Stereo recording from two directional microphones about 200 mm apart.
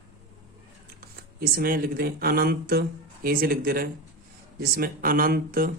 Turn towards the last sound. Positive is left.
turn(degrees=-45)  # may be behind; listen again after turning